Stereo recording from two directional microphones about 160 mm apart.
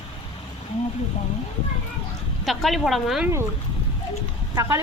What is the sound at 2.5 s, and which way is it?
Speech, centre (ahead or behind).